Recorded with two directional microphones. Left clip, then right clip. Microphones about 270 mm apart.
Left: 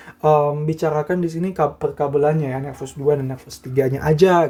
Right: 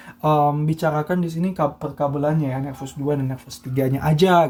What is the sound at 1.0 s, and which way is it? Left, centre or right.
Speech, centre.